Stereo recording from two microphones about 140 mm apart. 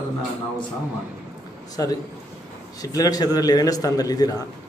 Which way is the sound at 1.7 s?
25° left (ahead or behind).